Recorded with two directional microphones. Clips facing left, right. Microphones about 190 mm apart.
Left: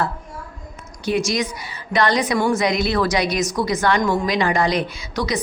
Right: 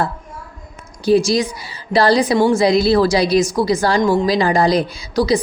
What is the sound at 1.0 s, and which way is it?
A woman's voice, 30° right (ahead or behind).